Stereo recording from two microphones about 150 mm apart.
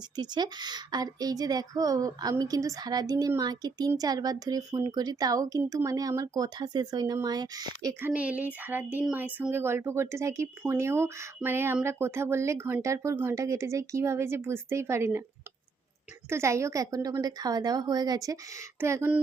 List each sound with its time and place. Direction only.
0.2 s a woman's voice: 30° right (ahead or behind)
8.1 s speech: 10° right (ahead or behind)
16.3 s a woman's voice: 20° right (ahead or behind)